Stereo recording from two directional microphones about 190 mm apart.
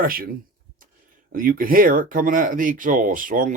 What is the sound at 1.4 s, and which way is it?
Speech, 50° right (ahead or behind).